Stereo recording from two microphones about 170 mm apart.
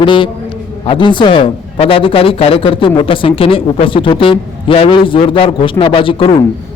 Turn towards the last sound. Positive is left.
turn(degrees=30)  # may be behind; listen again after turning